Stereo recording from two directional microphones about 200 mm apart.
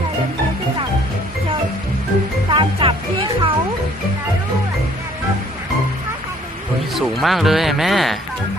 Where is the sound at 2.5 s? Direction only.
25° right (ahead or behind).